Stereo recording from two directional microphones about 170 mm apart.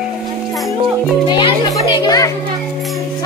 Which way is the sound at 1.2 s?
30° left (ahead or behind).